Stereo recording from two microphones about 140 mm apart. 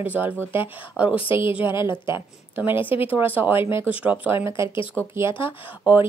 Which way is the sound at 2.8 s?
40° left (ahead or behind).